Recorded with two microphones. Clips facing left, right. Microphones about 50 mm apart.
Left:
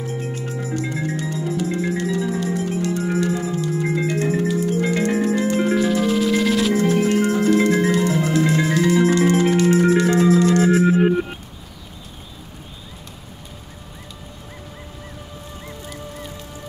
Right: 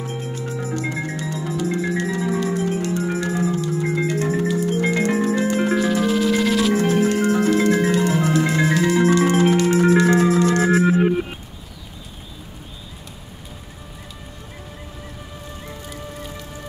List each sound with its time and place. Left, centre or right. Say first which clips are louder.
0.2 s music: even; left
0.7 s music: left 4 dB; right
3.6 s music: even; left
4.6 s music: even; right
5.8 s music: even; centre
6.7 s music: even; right